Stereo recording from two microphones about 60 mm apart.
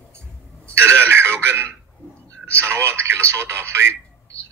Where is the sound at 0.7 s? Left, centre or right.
Right.